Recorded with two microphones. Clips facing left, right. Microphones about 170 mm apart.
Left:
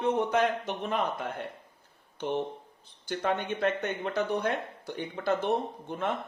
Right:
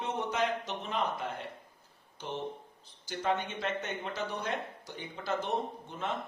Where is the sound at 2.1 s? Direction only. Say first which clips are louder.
Left 7 dB; 60° left (ahead or behind).